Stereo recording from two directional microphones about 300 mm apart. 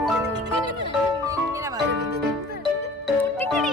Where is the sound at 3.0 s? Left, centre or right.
Centre.